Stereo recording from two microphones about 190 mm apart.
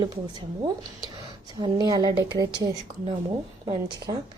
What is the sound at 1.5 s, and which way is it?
A woman's voice, 25° right (ahead or behind).